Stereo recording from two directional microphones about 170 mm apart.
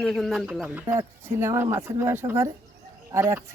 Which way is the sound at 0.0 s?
Centre (ahead or behind).